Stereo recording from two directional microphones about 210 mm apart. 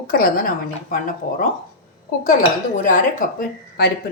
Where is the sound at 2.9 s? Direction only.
40° left (ahead or behind).